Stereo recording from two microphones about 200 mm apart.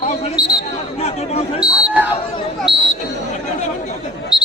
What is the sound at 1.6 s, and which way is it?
Speech, 20° left (ahead or behind).